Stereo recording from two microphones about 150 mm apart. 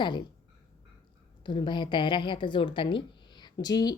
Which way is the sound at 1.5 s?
30° left (ahead or behind).